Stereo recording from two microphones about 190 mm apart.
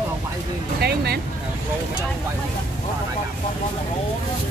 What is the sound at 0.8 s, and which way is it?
Speech, 55° right (ahead or behind).